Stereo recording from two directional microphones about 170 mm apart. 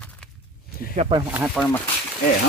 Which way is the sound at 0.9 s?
35° right (ahead or behind).